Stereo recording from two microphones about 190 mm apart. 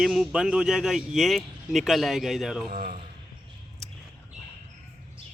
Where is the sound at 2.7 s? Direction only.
50° right (ahead or behind).